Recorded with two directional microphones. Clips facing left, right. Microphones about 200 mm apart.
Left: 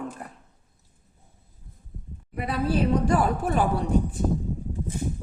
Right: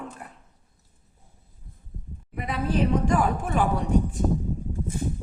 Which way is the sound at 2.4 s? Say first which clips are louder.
Left 1 dB; 35° left (ahead or behind).